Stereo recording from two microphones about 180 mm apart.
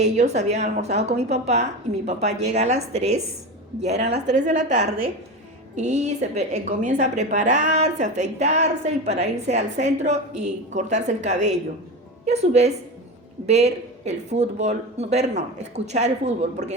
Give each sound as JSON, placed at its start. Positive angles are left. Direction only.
{"t": 0.0, "sound": "a woman's voice", "side_deg": -40}